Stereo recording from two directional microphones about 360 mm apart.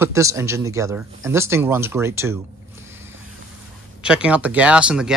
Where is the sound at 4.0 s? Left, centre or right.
Centre.